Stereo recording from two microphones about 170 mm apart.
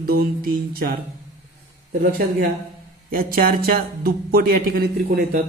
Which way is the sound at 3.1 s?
55° right (ahead or behind).